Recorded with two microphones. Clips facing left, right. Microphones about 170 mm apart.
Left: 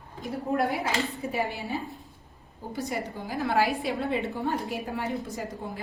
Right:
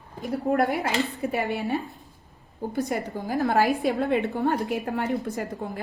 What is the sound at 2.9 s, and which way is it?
Speech, 50° right (ahead or behind).